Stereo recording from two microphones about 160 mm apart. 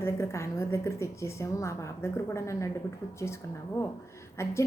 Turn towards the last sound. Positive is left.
turn(degrees=15)  # may be behind; listen again after turning